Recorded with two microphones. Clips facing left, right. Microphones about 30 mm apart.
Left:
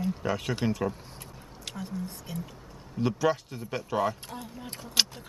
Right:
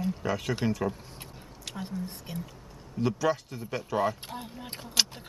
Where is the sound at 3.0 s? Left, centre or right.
Centre.